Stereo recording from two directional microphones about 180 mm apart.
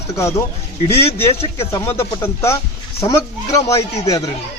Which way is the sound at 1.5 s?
15° left (ahead or behind).